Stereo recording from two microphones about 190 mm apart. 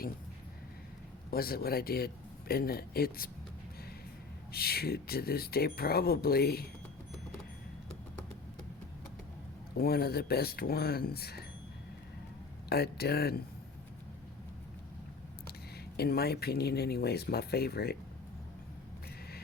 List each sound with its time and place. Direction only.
1.3 s speech: 50° left (ahead or behind)
4.5 s speech: 55° left (ahead or behind)
9.7 s speech: 55° left (ahead or behind)
12.6 s speech: 55° left (ahead or behind)
16.0 s speech: 55° left (ahead or behind)